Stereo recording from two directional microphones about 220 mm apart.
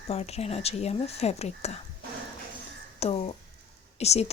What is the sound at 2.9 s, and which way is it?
Speech, 25° left (ahead or behind).